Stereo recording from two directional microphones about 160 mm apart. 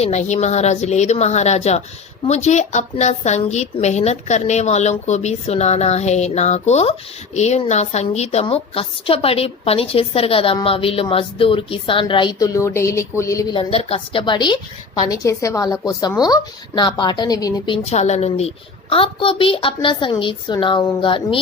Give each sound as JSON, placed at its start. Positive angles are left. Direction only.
{"t": 0.0, "sound": "a woman's voice", "side_deg": 45}
{"t": 13.6, "sound": "a woman's voice", "side_deg": 35}
{"t": 17.8, "sound": "a woman's voice", "side_deg": 45}